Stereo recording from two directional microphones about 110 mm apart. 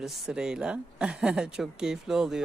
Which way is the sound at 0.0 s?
5° right (ahead or behind).